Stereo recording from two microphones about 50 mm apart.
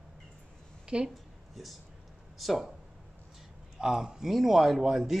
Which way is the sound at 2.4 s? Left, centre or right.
Centre.